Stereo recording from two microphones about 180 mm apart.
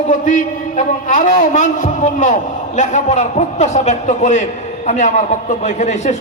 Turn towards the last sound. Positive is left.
turn(degrees=40)  # may be behind; listen again after turning